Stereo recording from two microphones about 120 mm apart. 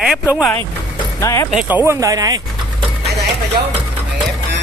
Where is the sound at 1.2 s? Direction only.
25° left (ahead or behind).